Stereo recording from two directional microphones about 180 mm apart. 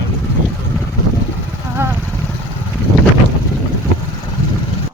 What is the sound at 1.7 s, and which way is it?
Vehicle, 10° right (ahead or behind).